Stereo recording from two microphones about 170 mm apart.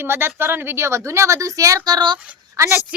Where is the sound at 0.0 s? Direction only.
15° right (ahead or behind).